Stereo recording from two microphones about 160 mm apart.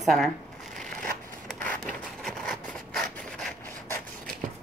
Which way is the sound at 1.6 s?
5° left (ahead or behind).